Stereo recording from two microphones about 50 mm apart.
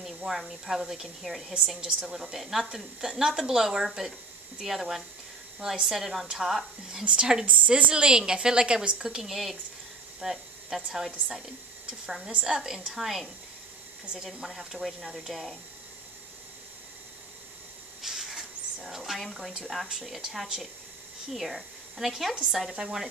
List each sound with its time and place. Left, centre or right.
0.0 s speech: centre
1.8 s speech: centre
2.1 s speech: centre
7.1 s speech: centre
12.4 s speech: centre
18.0 s speech: centre